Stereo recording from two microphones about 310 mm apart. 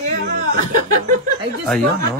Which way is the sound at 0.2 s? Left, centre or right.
Right.